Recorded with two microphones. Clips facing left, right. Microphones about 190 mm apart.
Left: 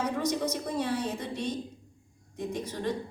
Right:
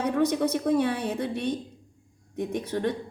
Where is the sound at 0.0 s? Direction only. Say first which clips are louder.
Right 5 dB; 60° right (ahead or behind).